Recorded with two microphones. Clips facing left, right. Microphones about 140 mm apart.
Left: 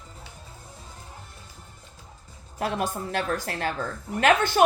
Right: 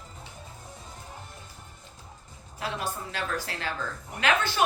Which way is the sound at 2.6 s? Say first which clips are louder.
Left 5 dB; 50° left (ahead or behind).